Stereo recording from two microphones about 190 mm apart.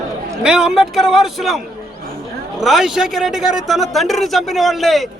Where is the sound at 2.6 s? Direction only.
Centre (ahead or behind).